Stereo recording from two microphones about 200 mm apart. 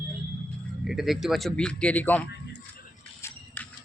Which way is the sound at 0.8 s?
Centre (ahead or behind).